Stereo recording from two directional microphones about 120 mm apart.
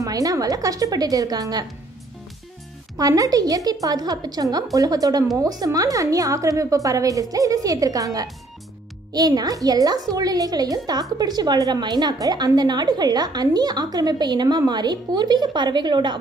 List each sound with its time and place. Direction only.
0.0 s speech: 30° right (ahead or behind)
3.0 s a woman's voice: 30° right (ahead or behind)